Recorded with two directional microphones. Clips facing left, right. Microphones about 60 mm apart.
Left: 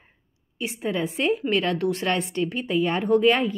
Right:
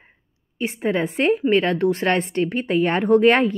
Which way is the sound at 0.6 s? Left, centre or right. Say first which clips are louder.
Right 5 dB; right.